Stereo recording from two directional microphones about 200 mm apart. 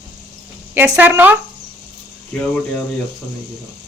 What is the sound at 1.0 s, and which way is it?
Speech, 10° right (ahead or behind).